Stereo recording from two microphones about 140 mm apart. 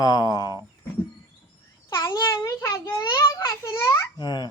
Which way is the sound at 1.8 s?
20° left (ahead or behind).